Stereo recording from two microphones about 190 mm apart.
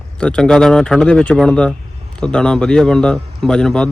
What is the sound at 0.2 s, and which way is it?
Speech, 5° left (ahead or behind).